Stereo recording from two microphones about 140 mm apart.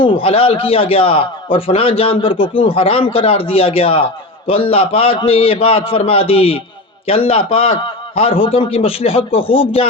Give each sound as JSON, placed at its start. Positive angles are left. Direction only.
{"t": 0.0, "sound": "a man's voice", "side_deg": 40}